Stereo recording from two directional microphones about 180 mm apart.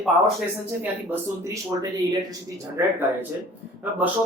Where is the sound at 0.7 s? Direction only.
10° right (ahead or behind).